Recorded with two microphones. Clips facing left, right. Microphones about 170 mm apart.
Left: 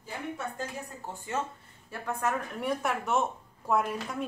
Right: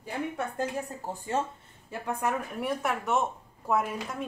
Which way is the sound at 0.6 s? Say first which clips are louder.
Right 6 dB; 55° right (ahead or behind).